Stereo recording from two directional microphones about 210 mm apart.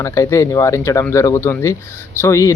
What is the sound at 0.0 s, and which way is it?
Speech, 15° left (ahead or behind).